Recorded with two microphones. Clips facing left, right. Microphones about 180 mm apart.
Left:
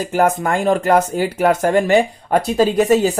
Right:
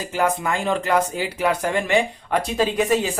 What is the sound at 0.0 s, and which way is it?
Speech, 45° left (ahead or behind).